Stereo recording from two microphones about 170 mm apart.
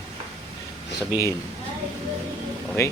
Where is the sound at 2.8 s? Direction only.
15° left (ahead or behind).